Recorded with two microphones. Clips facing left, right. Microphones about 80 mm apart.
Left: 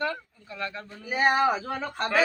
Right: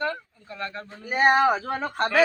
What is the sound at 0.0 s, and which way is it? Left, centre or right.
Speech, right.